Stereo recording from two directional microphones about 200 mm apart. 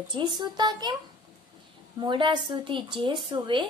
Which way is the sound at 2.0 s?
25° right (ahead or behind).